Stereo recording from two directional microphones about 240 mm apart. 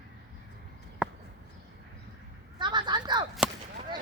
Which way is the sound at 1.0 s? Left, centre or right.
Centre.